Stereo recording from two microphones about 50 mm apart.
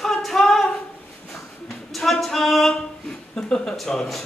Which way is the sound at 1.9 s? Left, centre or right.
Centre.